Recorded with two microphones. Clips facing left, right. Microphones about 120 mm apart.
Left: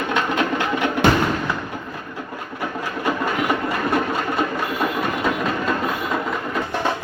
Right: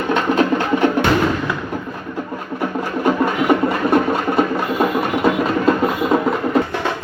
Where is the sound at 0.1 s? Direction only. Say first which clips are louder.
Right 6 dB; 35° right (ahead or behind).